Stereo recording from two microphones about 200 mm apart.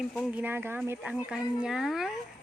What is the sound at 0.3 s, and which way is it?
A woman's voice, 10° right (ahead or behind).